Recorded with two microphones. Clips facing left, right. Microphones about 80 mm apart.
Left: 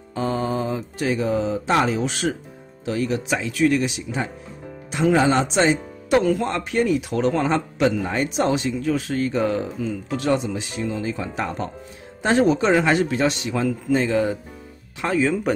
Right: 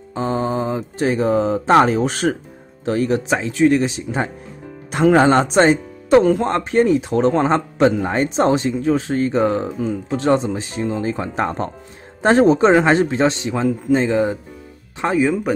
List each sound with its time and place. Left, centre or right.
0.1 s a man's voice: right
4.9 s speech: right
6.1 s a man's voice: right
15.1 s speech: centre